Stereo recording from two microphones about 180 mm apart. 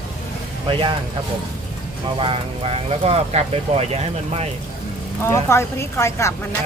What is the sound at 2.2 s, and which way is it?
Speech, 30° right (ahead or behind).